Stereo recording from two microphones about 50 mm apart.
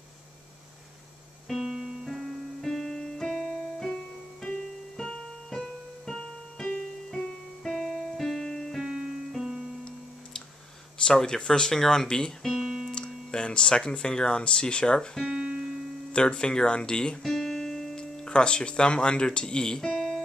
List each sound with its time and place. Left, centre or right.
1.5 s music: centre
2.0 s music: centre
3.3 s keyboard: centre
4.9 s keyboard: centre
7.6 s music: centre
8.8 s keyboard: centre
11.1 s speech: centre
12.5 s music: centre
12.9 s speech: centre
15.2 s music: centre
16.1 s speech: centre
17.2 s music: centre
17.9 s speech: centre